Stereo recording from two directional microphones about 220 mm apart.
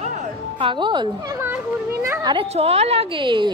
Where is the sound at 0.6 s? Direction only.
20° right (ahead or behind).